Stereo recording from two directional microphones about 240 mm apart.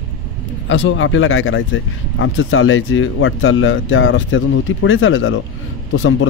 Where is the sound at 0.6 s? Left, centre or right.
Left.